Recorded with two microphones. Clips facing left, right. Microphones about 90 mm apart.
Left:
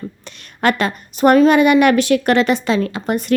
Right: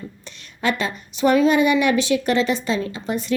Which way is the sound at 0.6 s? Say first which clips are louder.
Left 6 dB; 60° left (ahead or behind).